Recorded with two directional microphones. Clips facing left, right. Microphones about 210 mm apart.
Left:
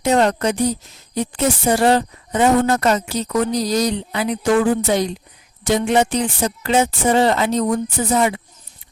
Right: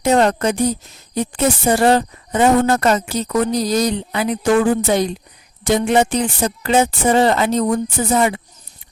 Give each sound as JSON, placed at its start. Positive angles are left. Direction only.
{"t": 0.0, "sound": "a woman's voice", "side_deg": -50}